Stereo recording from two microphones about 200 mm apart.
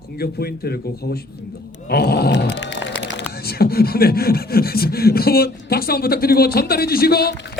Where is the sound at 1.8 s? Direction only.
50° left (ahead or behind).